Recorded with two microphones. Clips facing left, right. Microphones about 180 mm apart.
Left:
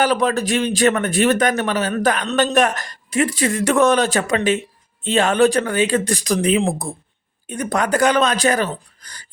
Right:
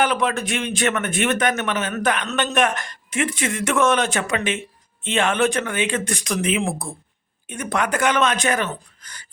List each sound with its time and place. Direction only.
0.0 s a man's voice: 35° left (ahead or behind)